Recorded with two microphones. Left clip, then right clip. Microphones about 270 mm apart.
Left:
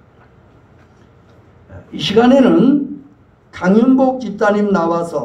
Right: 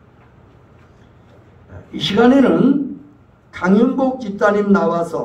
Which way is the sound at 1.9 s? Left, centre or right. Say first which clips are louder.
Left 2 dB; left.